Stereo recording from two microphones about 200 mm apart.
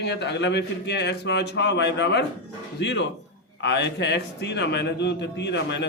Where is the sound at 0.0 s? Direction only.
60° left (ahead or behind).